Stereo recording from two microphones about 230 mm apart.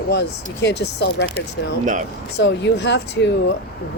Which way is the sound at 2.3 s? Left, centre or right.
Left.